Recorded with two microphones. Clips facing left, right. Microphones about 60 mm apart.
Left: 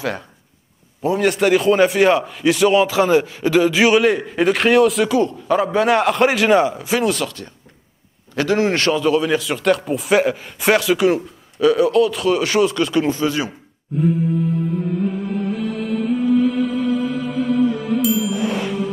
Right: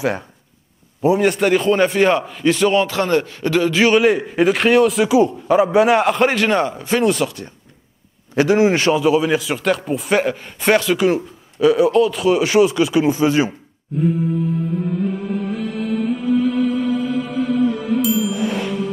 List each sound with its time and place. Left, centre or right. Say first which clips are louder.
1.0 s a man's voice: right 1 dB; centre
8.4 s a man's voice: right 3 dB; centre
13.2 s speech: right 4 dB; right
18.0 s music: left 1 dB; centre